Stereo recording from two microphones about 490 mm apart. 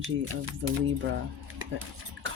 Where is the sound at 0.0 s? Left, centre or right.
Right.